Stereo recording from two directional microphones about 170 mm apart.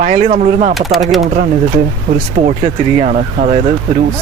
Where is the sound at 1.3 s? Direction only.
50° right (ahead or behind).